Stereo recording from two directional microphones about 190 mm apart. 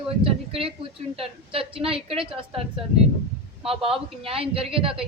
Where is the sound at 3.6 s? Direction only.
30° right (ahead or behind).